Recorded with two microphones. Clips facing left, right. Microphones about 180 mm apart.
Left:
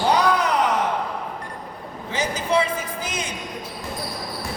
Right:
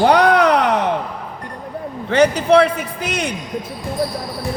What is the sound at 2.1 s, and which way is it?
A man's voice, 65° right (ahead or behind).